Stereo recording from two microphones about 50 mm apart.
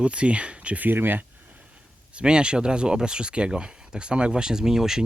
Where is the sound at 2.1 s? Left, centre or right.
Centre.